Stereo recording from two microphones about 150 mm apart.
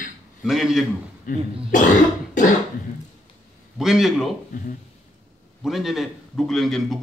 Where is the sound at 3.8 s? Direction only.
Centre (ahead or behind).